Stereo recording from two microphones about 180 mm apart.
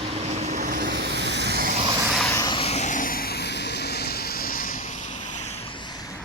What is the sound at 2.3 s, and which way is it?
Vehicle, 25° left (ahead or behind).